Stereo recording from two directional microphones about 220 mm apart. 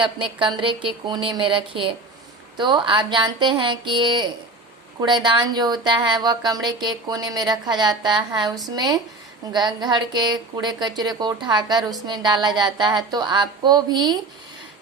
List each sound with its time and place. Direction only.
0.0 s a woman's voice: 20° right (ahead or behind)